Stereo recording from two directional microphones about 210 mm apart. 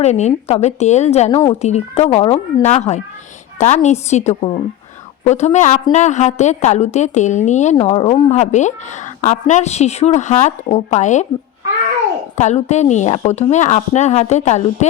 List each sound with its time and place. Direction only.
0.0 s a woman's voice: 30° left (ahead or behind)
12.4 s a woman's voice: 35° left (ahead or behind)